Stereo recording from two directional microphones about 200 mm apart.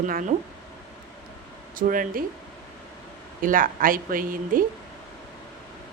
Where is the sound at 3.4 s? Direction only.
45° right (ahead or behind).